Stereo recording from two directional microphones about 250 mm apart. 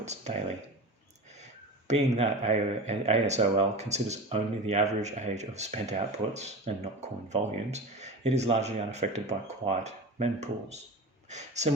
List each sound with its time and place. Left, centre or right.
0.0 s speech: right
1.9 s speech: right